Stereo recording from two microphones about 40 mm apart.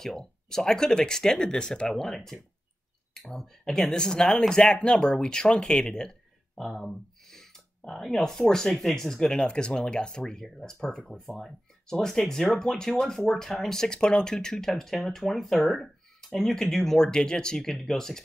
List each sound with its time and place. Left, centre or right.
0.0 s speech: centre
3.9 s speech: centre
7.2 s a sound: centre
7.9 s speech: centre
9.5 s speech: left
11.1 s speech: centre